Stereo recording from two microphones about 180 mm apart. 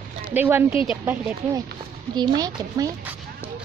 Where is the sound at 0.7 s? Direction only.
30° left (ahead or behind).